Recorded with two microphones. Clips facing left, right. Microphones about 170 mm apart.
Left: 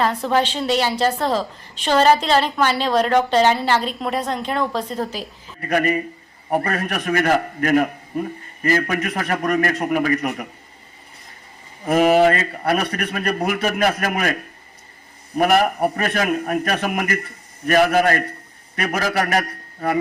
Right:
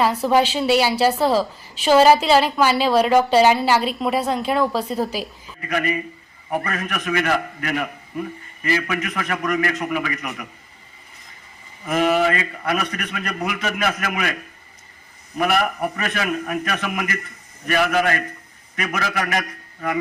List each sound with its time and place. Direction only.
0.0 s a woman's voice: 10° right (ahead or behind)
5.5 s a man's voice: 40° left (ahead or behind)
11.9 s a man's voice: 40° left (ahead or behind)
15.4 s a man's voice: 40° left (ahead or behind)